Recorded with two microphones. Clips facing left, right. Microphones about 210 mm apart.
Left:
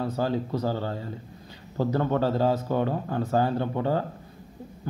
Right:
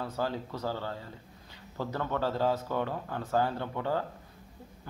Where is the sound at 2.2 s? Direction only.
15° left (ahead or behind).